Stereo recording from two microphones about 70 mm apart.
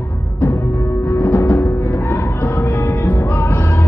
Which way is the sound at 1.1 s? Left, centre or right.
Left.